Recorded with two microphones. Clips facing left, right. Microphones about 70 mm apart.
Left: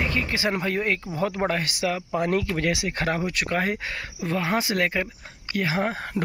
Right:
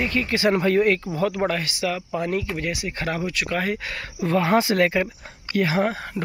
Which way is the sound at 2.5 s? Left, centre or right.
Left.